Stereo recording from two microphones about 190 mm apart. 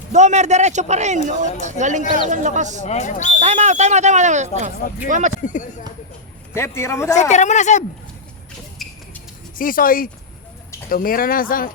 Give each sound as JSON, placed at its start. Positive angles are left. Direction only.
{"t": 0.1, "sound": "speech", "side_deg": -40}
{"t": 2.8, "sound": "speech", "side_deg": 40}
{"t": 3.4, "sound": "speech", "side_deg": -35}
{"t": 5.4, "sound": "speech", "side_deg": 40}
{"t": 6.5, "sound": "a man's voice", "side_deg": 15}
{"t": 7.2, "sound": "speech", "side_deg": 40}
{"t": 8.8, "sound": "a sound", "side_deg": 0}
{"t": 9.6, "sound": "speech", "side_deg": 45}